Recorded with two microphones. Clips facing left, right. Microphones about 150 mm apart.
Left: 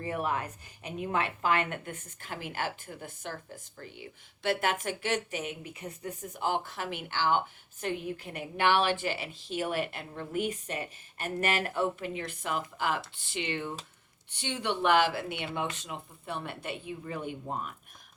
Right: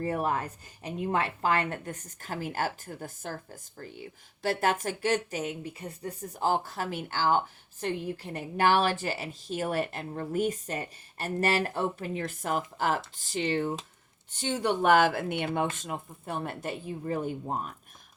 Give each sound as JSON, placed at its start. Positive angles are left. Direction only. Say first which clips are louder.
{"t": 0.0, "sound": "a woman's voice", "louder": "right 3 dB", "side_deg": -40}